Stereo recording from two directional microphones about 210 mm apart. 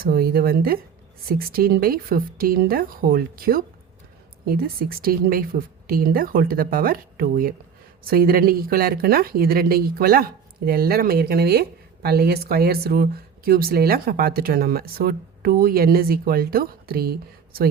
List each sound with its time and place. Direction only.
0.0 s speech: 45° right (ahead or behind)